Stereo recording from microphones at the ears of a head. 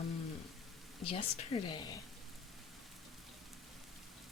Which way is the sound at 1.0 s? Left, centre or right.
Left.